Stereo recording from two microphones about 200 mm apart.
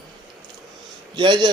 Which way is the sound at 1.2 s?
20° right (ahead or behind).